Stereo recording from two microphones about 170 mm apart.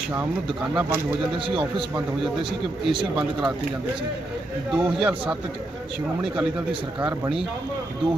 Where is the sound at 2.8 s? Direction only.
5° right (ahead or behind).